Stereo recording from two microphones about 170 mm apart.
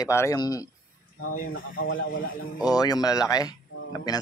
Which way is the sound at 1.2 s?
55° left (ahead or behind).